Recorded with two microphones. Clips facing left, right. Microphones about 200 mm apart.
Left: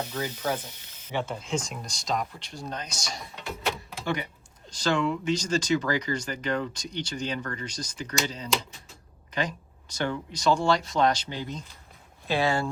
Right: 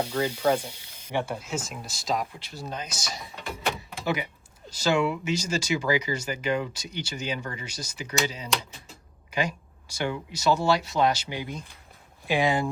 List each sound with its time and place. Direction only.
0.0 s speech: 10° right (ahead or behind)